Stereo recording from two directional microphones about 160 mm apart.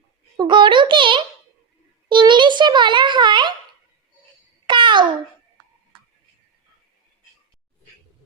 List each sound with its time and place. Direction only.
0.3 s a child's voice: 30° right (ahead or behind)
4.6 s babbling: 30° right (ahead or behind)